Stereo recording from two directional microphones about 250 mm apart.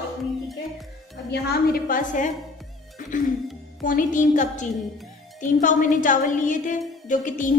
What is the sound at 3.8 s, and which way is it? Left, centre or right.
A woman's voice, left.